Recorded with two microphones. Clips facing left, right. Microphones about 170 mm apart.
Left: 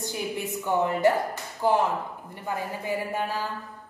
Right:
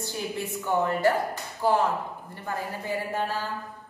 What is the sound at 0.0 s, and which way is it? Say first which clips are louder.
A woman's voice: left 1 dB; 20° left (ahead or behind).